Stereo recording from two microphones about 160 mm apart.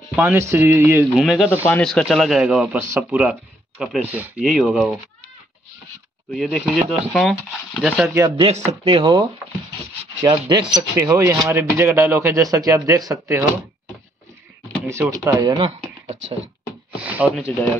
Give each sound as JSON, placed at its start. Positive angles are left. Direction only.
{"t": 0.1, "sound": "speech", "side_deg": -10}
{"t": 1.1, "sound": "a man's voice", "side_deg": 0}
{"t": 1.5, "sound": "speech", "side_deg": 15}
{"t": 1.9, "sound": "a man's voice", "side_deg": 0}
{"t": 6.3, "sound": "a man's voice", "side_deg": 0}
{"t": 8.4, "sound": "speech", "side_deg": -40}
{"t": 8.9, "sound": "speech", "side_deg": -30}
{"t": 14.9, "sound": "speech", "side_deg": -20}
{"t": 17.0, "sound": "speech", "side_deg": -10}